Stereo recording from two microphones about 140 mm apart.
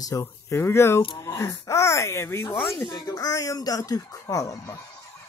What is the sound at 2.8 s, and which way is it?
Speech, 25° left (ahead or behind).